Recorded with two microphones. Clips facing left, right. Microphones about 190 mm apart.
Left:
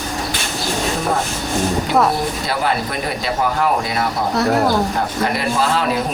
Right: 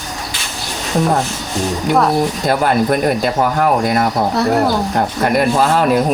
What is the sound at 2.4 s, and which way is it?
Speech, 50° right (ahead or behind).